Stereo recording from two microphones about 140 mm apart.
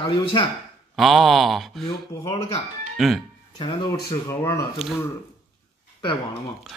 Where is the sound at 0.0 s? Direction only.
40° left (ahead or behind).